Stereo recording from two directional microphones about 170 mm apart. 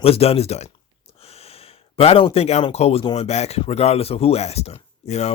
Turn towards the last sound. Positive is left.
turn(degrees=40)  # may be behind; listen again after turning